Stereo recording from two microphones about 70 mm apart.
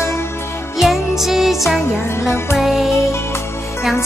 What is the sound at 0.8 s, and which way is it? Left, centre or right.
Music, centre.